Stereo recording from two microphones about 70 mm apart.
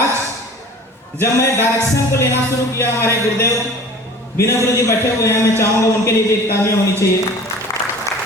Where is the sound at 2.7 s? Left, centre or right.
Left.